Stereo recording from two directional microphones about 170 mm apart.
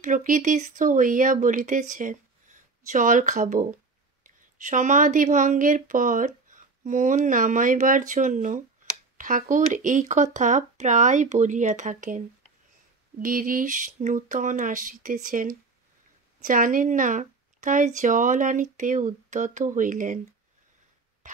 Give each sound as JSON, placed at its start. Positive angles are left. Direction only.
{"t": 0.0, "sound": "speech", "side_deg": -50}